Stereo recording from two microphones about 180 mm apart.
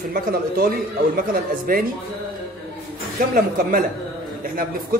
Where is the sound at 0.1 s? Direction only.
55° right (ahead or behind).